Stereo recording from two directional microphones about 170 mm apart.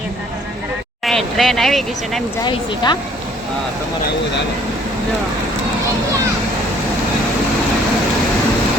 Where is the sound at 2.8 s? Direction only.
25° left (ahead or behind).